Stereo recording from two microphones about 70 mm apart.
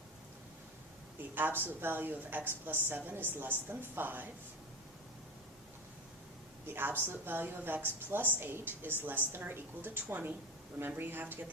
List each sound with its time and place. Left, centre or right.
1.4 s a woman's voice: right
6.7 s a woman's voice: right